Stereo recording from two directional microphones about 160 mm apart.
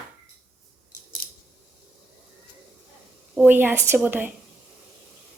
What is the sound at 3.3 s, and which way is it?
A woman's voice, 10° right (ahead or behind).